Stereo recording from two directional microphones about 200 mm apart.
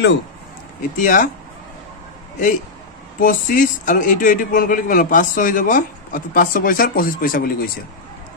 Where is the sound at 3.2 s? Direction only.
40° left (ahead or behind).